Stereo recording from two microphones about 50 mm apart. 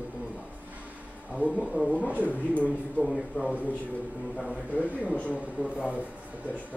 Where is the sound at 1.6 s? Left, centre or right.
Centre.